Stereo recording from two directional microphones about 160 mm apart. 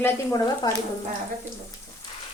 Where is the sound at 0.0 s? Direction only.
25° left (ahead or behind).